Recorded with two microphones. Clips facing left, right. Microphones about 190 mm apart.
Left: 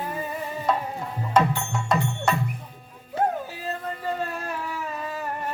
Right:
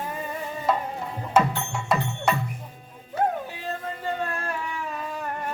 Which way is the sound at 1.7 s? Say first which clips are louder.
Left 1 dB; 5° right (ahead or behind).